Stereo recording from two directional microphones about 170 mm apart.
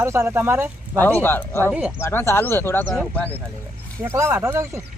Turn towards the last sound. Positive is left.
turn(degrees=-15)  # may be behind; listen again after turning